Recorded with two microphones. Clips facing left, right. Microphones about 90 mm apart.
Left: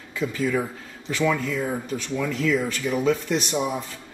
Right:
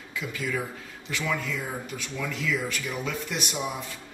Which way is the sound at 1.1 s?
35° left (ahead or behind).